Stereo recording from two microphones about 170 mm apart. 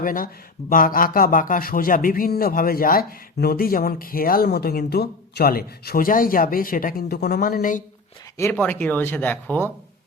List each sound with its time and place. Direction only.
0.0 s a man's voice: 55° left (ahead or behind)
8.4 s speech: 15° left (ahead or behind)